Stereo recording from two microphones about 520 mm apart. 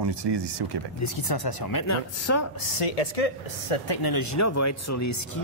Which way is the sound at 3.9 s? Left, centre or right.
Left.